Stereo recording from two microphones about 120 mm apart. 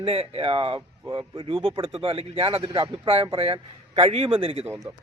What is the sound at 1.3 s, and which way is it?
A man's voice, 50° right (ahead or behind).